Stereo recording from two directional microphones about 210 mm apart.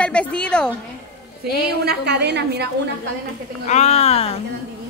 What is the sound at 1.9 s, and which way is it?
Speech, 50° right (ahead or behind).